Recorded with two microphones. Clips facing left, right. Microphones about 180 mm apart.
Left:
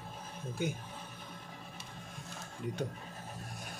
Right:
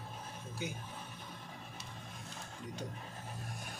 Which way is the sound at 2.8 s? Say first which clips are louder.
Left 7 dB; 55° left (ahead or behind).